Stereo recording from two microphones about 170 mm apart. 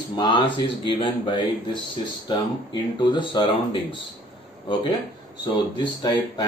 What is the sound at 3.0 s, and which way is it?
Speech, 25° left (ahead or behind).